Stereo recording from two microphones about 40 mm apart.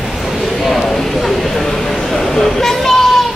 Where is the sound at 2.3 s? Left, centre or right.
Centre.